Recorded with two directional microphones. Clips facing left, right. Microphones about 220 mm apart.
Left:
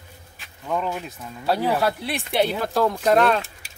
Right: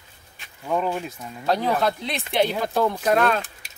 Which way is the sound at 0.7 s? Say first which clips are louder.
Right 2 dB; 10° right (ahead or behind).